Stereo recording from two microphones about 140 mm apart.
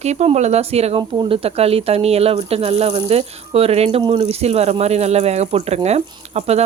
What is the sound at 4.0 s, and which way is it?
Speech, 35° right (ahead or behind).